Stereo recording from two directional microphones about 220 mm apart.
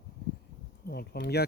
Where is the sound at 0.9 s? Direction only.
45° left (ahead or behind).